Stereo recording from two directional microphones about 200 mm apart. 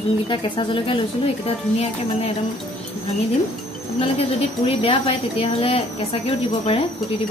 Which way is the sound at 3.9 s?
30° left (ahead or behind).